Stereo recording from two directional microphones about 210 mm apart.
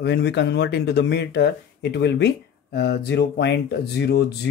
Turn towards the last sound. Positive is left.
turn(degrees=55)  # may be behind; listen again after turning